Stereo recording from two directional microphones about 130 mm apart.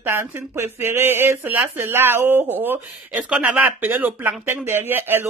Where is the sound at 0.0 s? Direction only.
20° right (ahead or behind).